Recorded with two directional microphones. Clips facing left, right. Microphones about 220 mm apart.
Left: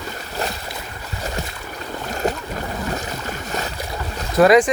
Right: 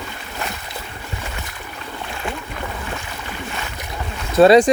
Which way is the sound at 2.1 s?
40° left (ahead or behind).